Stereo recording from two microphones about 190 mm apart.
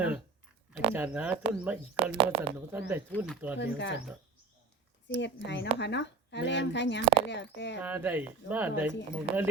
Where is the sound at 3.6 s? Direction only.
70° left (ahead or behind).